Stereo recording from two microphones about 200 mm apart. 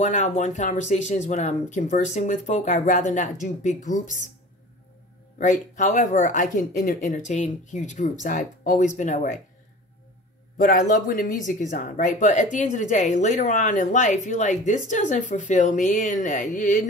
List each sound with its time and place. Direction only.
0.0 s speech: 35° left (ahead or behind)
5.4 s speech: 40° left (ahead or behind)
10.6 s speech: 40° left (ahead or behind)